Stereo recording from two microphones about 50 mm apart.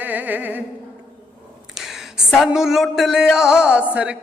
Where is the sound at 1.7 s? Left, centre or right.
Centre.